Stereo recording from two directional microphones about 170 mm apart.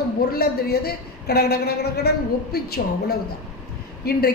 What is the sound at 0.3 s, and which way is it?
A woman's voice, 65° left (ahead or behind).